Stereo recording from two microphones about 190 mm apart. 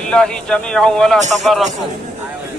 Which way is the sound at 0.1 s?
5° left (ahead or behind).